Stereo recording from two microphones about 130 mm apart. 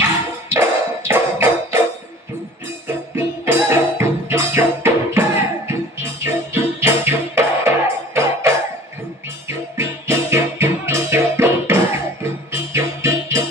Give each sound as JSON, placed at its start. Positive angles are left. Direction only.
{"t": 0.5, "sound": "music", "side_deg": -20}
{"t": 3.2, "sound": "music", "side_deg": -20}
{"t": 9.5, "sound": "music", "side_deg": -20}